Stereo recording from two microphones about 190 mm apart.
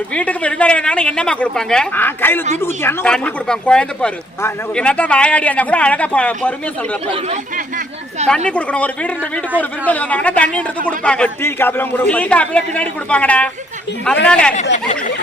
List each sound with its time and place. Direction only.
0.1 s a man's voice: 5° left (ahead or behind)
8.4 s a man's voice: 5° left (ahead or behind)
14.5 s speech: 35° left (ahead or behind)